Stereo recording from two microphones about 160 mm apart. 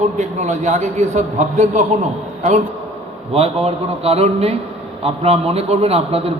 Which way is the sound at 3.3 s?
40° right (ahead or behind).